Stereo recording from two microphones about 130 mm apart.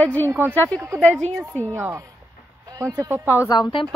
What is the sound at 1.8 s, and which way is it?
A woman's voice, 20° right (ahead or behind).